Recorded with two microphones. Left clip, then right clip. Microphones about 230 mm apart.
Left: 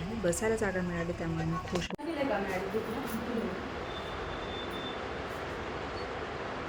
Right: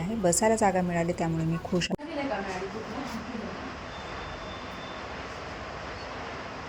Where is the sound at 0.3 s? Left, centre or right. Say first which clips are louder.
Right 7 dB; right.